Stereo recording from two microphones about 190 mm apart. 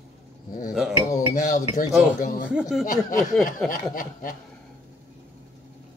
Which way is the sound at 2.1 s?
45° left (ahead or behind).